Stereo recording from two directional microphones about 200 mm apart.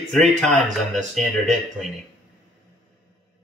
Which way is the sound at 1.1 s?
Centre (ahead or behind).